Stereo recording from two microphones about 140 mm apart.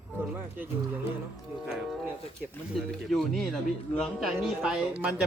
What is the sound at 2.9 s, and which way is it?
Speech, 5° left (ahead or behind).